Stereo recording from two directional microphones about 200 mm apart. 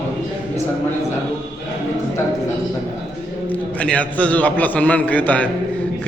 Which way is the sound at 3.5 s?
5° left (ahead or behind).